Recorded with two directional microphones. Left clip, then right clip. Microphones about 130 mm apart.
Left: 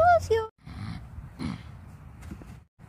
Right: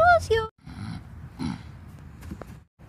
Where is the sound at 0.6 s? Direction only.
35° left (ahead or behind).